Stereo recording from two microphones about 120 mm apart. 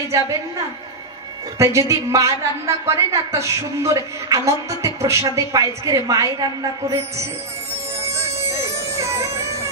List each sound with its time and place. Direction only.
1.6 s a woman's voice: 25° right (ahead or behind)
8.0 s music: 25° right (ahead or behind)